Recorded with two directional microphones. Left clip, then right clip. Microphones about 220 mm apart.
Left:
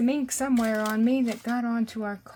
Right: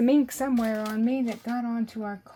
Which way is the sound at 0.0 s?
25° right (ahead or behind).